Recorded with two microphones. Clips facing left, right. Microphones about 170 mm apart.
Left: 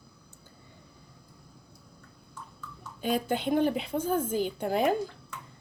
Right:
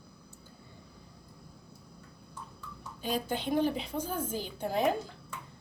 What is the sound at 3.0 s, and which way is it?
A woman's voice, 55° left (ahead or behind).